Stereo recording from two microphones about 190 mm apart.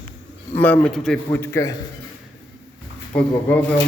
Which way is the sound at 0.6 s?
10° left (ahead or behind).